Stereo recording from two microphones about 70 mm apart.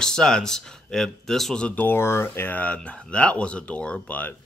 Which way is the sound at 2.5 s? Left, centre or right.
Centre.